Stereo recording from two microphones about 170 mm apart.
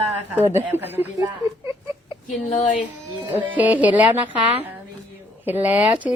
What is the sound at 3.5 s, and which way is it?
Speech, 10° right (ahead or behind).